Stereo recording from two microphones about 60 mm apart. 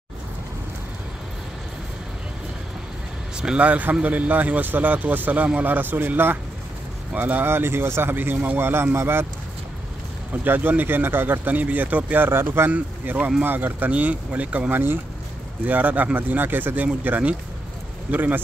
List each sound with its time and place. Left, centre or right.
3.3 s speech: centre; by 6.3 s right
7.1 s speech: right
7.4 s speech: right
8.5 s speech: right
10.3 s speech: right
12.3 s speech: right
14.7 s speech: right